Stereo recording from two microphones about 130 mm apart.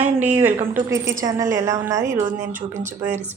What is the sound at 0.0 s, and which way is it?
A woman's voice, 15° right (ahead or behind).